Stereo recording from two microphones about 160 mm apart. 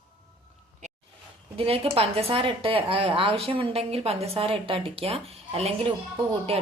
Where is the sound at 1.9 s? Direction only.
40° right (ahead or behind).